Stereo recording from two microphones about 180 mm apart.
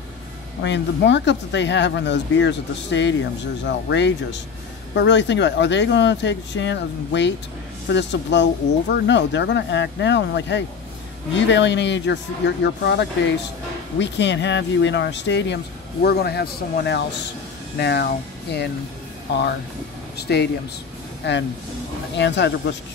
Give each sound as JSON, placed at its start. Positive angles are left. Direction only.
{"t": 0.6, "sound": "speech", "side_deg": 80}
{"t": 20.2, "sound": "speech", "side_deg": 65}
{"t": 22.1, "sound": "speech", "side_deg": 75}